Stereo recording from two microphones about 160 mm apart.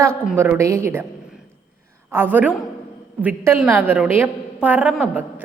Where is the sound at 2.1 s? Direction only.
15° right (ahead or behind).